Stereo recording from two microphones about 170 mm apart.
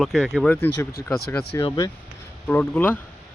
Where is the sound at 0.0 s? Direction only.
Centre (ahead or behind).